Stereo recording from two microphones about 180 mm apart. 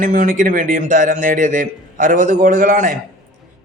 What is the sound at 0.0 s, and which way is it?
A man's voice, 45° right (ahead or behind).